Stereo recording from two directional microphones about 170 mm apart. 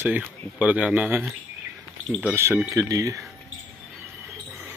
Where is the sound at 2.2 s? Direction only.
15° right (ahead or behind).